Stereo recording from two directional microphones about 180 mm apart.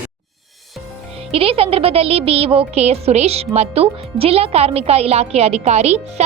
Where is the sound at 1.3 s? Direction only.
30° right (ahead or behind).